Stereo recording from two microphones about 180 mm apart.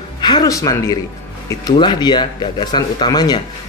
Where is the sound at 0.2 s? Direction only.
20° left (ahead or behind).